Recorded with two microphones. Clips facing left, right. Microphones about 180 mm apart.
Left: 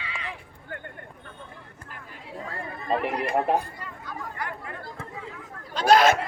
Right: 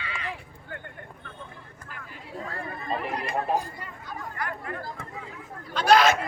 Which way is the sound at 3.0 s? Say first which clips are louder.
Left 4 dB; 65° left (ahead or behind).